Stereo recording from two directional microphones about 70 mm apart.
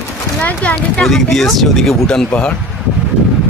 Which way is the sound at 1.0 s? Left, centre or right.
Centre.